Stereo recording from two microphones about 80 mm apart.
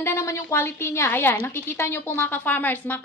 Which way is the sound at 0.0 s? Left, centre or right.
Left.